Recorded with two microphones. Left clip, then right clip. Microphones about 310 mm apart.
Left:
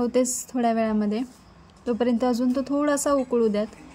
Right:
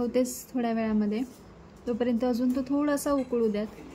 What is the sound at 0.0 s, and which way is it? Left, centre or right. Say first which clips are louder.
Speech: left 4 dB; centre.